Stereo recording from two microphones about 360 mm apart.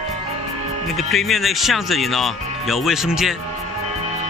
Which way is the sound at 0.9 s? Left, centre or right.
Centre.